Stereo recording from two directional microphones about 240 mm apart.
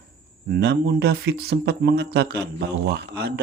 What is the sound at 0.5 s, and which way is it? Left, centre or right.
Speech, right.